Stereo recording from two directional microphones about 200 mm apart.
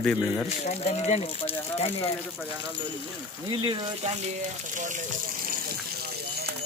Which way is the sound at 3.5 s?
25° right (ahead or behind).